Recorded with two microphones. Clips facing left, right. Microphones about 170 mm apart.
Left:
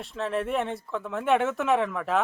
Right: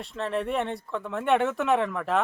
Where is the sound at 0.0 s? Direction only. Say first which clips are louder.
Even; centre (ahead or behind).